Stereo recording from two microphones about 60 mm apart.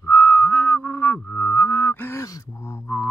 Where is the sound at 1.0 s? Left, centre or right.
Left.